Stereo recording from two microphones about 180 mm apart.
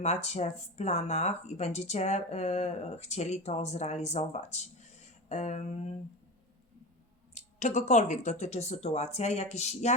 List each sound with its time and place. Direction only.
0.0 s speech: 40° left (ahead or behind)
7.3 s speech: 40° left (ahead or behind)